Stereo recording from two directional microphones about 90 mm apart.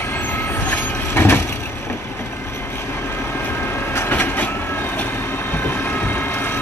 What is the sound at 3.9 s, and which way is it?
Train, 20° left (ahead or behind).